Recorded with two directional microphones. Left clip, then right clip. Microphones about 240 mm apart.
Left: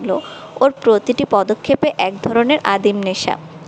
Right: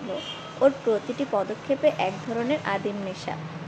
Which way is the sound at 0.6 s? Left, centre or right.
Left.